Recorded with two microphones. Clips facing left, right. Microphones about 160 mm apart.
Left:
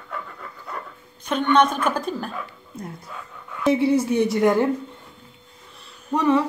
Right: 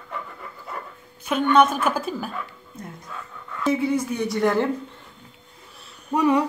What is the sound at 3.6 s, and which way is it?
A woman's voice, 30° left (ahead or behind).